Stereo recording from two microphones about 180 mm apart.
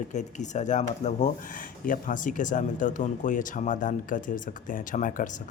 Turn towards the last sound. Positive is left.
turn(degrees=45)  # may be behind; listen again after turning